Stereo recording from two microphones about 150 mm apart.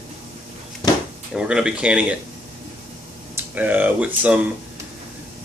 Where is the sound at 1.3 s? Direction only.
5° right (ahead or behind).